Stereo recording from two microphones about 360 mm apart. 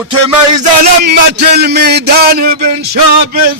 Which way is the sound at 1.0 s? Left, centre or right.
Right.